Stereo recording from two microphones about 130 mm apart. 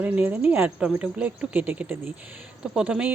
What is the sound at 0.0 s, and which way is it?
Speech, 15° right (ahead or behind).